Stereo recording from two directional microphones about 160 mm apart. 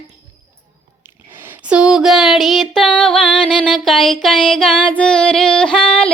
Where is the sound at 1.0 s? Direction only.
15° right (ahead or behind).